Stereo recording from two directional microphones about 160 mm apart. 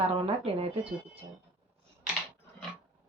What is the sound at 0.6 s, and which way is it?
Speech, 35° right (ahead or behind).